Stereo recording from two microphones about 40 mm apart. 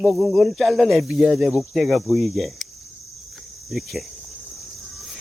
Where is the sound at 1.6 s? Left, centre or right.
Centre.